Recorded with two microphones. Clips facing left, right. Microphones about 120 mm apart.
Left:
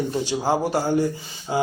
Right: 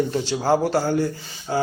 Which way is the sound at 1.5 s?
20° left (ahead or behind).